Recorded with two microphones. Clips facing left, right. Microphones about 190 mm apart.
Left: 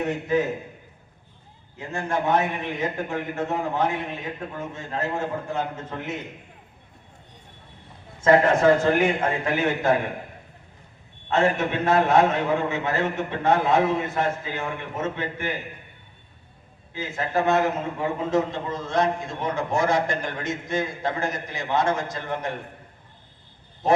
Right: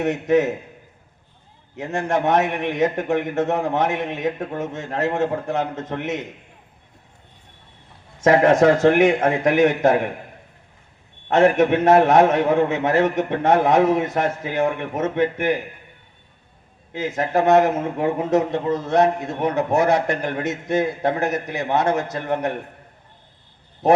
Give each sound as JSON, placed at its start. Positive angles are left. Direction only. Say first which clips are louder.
{"t": 0.0, "sound": "a man's voice", "louder": "right 5 dB", "side_deg": -75}
{"t": 1.7, "sound": "a man's voice", "louder": "right 5 dB", "side_deg": -75}
{"t": 8.2, "sound": "a man's voice", "louder": "right 3 dB", "side_deg": -80}
{"t": 11.3, "sound": "a man's voice", "louder": "right 7 dB", "side_deg": -80}
{"t": 16.9, "sound": "a man's voice", "louder": "right 5 dB", "side_deg": -80}
{"t": 23.8, "sound": "speech", "louder": "right 5 dB", "side_deg": -65}